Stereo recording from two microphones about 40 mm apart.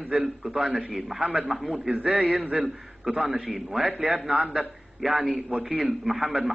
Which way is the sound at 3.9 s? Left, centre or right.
Right.